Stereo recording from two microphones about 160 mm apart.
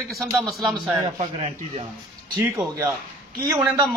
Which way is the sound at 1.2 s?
40° right (ahead or behind).